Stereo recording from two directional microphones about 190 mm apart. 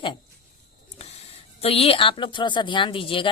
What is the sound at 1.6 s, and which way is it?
Speech, 30° left (ahead or behind).